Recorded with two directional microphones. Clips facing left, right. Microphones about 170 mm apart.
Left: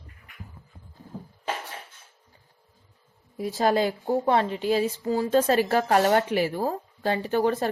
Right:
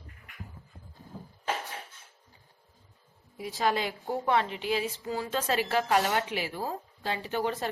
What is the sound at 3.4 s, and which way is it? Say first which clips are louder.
A woman's voice: left 6 dB; 40° left (ahead or behind).